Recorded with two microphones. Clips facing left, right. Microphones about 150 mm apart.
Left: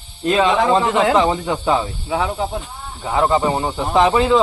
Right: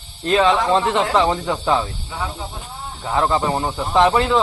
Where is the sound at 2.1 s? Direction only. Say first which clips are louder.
Left 10 dB; 80° left.